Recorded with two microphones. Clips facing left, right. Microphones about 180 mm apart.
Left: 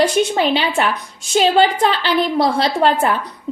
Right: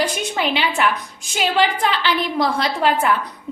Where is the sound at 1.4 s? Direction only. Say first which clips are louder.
Left 5 dB; 35° left (ahead or behind).